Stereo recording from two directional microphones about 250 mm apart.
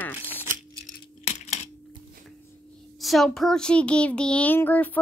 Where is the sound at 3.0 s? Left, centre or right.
Centre.